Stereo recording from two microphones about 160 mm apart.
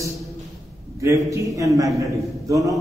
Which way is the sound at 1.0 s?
20° right (ahead or behind).